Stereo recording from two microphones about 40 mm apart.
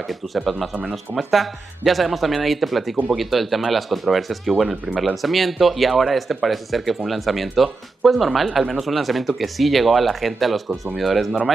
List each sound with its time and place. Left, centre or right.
0.0 s speech: centre